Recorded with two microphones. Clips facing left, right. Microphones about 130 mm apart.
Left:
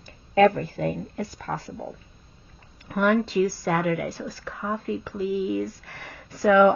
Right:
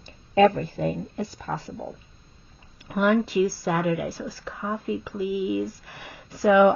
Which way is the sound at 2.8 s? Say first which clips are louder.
Even; 15° right (ahead or behind).